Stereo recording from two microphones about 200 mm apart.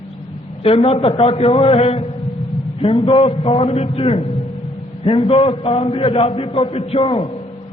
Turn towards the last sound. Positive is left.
turn(degrees=25)  # may be behind; listen again after turning